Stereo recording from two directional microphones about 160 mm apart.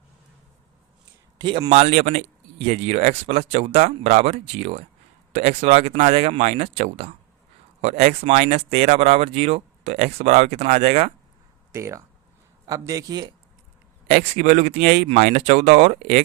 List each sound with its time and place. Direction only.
1.4 s a man's voice: 30° right (ahead or behind)
1.7 s speech: 45° right (ahead or behind)
11.7 s a man's voice: 15° right (ahead or behind)
14.1 s speech: 45° right (ahead or behind)